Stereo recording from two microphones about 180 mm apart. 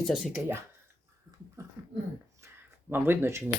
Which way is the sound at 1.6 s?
15° right (ahead or behind).